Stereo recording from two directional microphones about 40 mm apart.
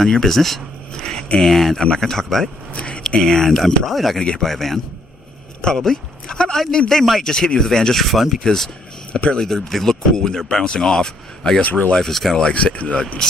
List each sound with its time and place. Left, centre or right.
0.0 s speech: centre
2.7 s a sound: left
3.2 s a man's voice: centre
7.0 s a man's voice: centre
7.3 s speech: centre
8.0 s a man's voice: centre
11.6 s speech: left
11.9 s speech: centre
12.4 s speech: left